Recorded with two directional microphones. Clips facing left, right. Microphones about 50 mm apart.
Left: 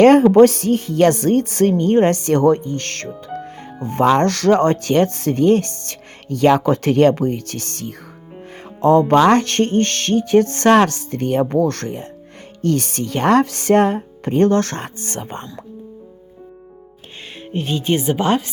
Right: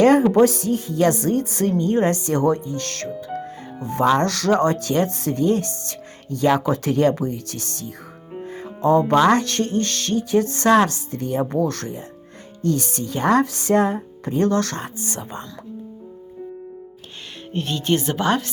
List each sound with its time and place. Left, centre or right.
0.0 s music: left
12.6 s speech: left
14.8 s music: left
17.5 s speech: centre